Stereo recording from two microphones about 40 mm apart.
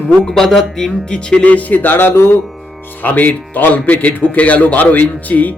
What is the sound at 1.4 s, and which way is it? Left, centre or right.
Music, left.